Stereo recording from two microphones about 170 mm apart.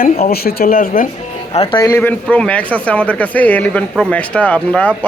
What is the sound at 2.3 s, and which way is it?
Speech, 10° left (ahead or behind).